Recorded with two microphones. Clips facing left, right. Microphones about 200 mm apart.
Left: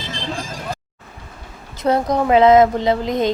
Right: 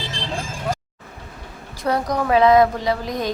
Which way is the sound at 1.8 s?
25° left (ahead or behind).